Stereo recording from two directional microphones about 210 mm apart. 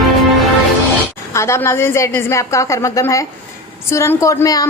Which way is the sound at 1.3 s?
15° left (ahead or behind).